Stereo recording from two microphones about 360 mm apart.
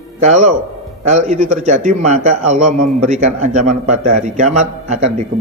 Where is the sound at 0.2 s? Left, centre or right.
Centre.